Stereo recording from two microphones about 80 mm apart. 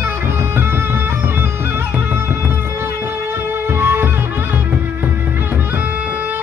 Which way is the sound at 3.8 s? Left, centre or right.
Right.